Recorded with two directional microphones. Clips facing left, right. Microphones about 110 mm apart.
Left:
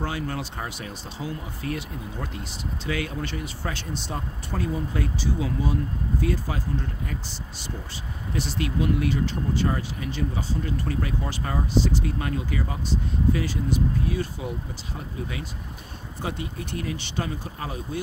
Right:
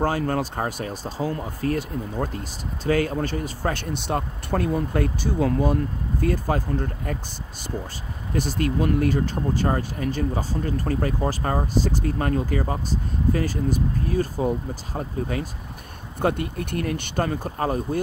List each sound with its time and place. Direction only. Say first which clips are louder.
0.0 s speech: right 7 dB; 45° right (ahead or behind)
8.3 s speech: right 4 dB; 45° right (ahead or behind)
16.2 s speech: right 8 dB; 55° right (ahead or behind)